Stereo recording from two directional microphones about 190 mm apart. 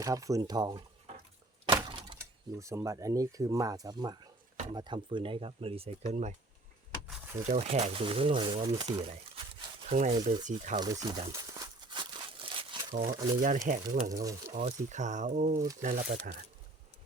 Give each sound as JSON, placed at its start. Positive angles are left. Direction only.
{"t": 0.0, "sound": "speech", "side_deg": -15}
{"t": 1.6, "sound": "a sound", "side_deg": -25}
{"t": 2.1, "sound": "speech", "side_deg": -15}
{"t": 7.1, "sound": "a sound", "side_deg": -10}
{"t": 7.4, "sound": "speech", "side_deg": -35}
{"t": 10.8, "sound": "speech", "side_deg": -20}
{"t": 11.3, "sound": "crumpling", "side_deg": -20}
{"t": 13.0, "sound": "speech", "side_deg": -15}
{"t": 13.7, "sound": "speech", "side_deg": -45}
{"t": 14.1, "sound": "speech", "side_deg": -15}
{"t": 14.5, "sound": "speech", "side_deg": -40}